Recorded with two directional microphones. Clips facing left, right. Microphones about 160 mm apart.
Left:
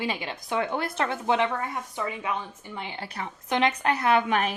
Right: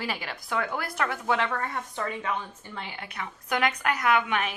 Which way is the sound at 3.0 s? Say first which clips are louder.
Left 2 dB; 35° left (ahead or behind).